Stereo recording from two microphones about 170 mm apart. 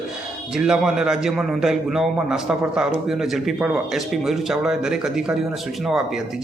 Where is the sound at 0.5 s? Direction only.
5° right (ahead or behind).